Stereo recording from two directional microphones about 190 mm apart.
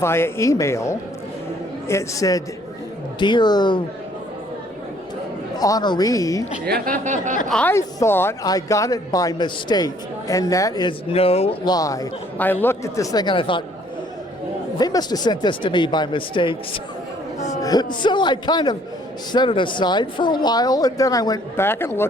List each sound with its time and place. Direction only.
0.0 s speech: 15° left (ahead or behind)
5.5 s speech: 20° left (ahead or behind)
6.7 s speech: 50° right (ahead or behind)
7.5 s speech: 10° left (ahead or behind); by 13.7 s 25° left (ahead or behind)
14.8 s speech: 20° left (ahead or behind)